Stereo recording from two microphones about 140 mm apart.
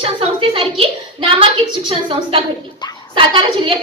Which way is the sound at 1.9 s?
40° right (ahead or behind).